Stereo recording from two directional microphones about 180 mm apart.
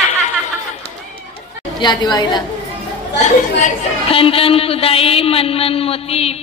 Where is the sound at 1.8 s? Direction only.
25° left (ahead or behind).